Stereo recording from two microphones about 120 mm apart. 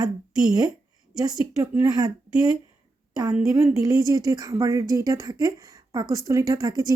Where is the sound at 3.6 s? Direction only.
25° right (ahead or behind).